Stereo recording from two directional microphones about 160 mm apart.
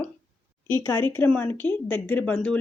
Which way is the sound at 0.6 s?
15° left (ahead or behind).